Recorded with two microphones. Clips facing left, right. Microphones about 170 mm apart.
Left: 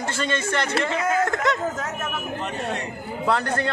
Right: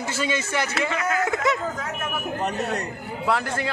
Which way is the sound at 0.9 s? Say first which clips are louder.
Left 2 dB; 30° left (ahead or behind).